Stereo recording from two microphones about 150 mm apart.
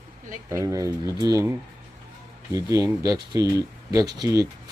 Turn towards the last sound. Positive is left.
turn(degrees=-25)  # may be behind; listen again after turning